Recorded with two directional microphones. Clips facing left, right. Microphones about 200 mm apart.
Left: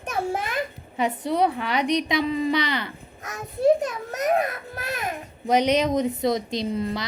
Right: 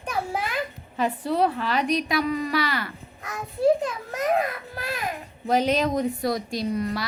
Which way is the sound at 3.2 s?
45° left (ahead or behind).